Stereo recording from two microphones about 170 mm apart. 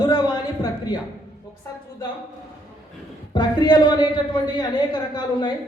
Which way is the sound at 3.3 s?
25° left (ahead or behind).